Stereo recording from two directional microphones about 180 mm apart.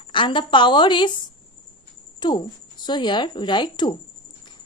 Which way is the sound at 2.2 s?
25° left (ahead or behind).